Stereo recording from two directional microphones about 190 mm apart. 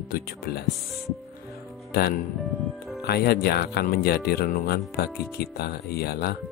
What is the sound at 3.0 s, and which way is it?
Speech, 55° left (ahead or behind).